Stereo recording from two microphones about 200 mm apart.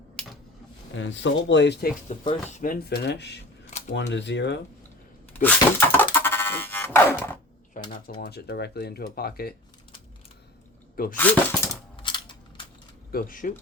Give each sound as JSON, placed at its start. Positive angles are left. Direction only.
{"t": 0.9, "sound": "speech", "side_deg": 65}
{"t": 2.0, "sound": "speech", "side_deg": 35}
{"t": 2.8, "sound": "speech", "side_deg": 55}
{"t": 3.7, "sound": "camera", "side_deg": 35}
{"t": 3.9, "sound": "speech", "side_deg": 60}
{"t": 5.3, "sound": "music", "side_deg": 10}
{"t": 7.8, "sound": "typewriter", "side_deg": 40}
{"t": 8.2, "sound": "speech", "side_deg": 50}
{"t": 11.2, "sound": "speech", "side_deg": 10}
{"t": 12.0, "sound": "a sound", "side_deg": 25}
{"t": 13.1, "sound": "speech", "side_deg": 45}